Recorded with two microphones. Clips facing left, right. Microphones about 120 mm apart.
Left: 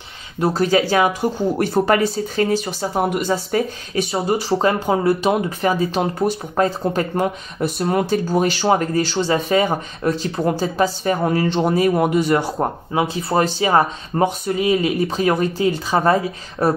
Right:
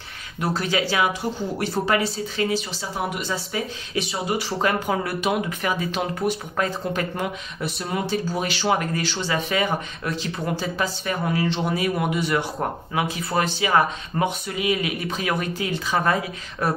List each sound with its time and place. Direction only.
0.4 s speech: 35° left (ahead or behind)
4.1 s speech: 30° left (ahead or behind)
7.8 s speech: 50° left (ahead or behind); by 11.3 s 35° left (ahead or behind)
11.3 s speech: 55° left (ahead or behind)
11.6 s speech: 40° left (ahead or behind)